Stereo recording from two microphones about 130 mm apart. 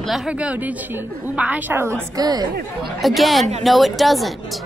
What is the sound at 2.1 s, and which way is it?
Speech, 30° right (ahead or behind).